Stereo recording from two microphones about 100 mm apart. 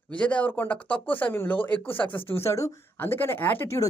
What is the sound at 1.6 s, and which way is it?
Speech, 55° left (ahead or behind).